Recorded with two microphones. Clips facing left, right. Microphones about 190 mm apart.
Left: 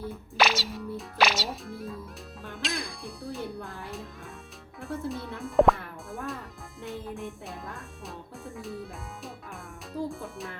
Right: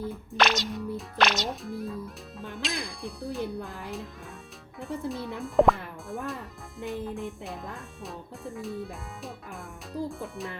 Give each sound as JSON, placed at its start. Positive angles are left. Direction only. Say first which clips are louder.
{"t": 0.1, "sound": "speech", "louder": "left 1 dB", "side_deg": 0}
{"t": 3.6, "sound": "speech", "louder": "right 2 dB", "side_deg": -15}
{"t": 4.8, "sound": "speech", "louder": "right 1 dB", "side_deg": 0}